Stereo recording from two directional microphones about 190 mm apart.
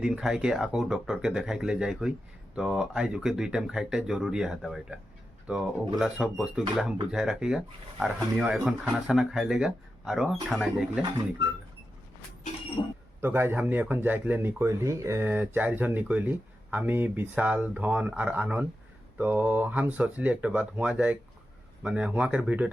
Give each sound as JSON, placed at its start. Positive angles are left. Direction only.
{"t": 0.0, "sound": "speech", "side_deg": -5}
{"t": 12.8, "sound": "speech", "side_deg": 25}
{"t": 13.2, "sound": "speech", "side_deg": -10}